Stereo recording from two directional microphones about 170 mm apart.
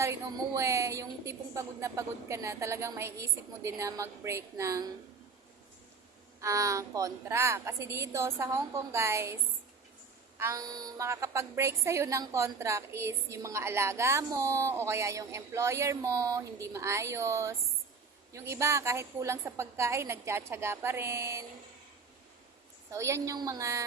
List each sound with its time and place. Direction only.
0.0 s a woman's voice: 15° right (ahead or behind)
6.4 s a woman's voice: 20° right (ahead or behind)
22.9 s a woman's voice: 15° right (ahead or behind)